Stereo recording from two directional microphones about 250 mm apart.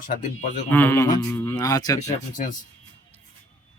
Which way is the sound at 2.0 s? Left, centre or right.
Left.